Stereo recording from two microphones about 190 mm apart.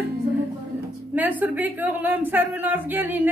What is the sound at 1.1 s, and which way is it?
Speech, 10° right (ahead or behind).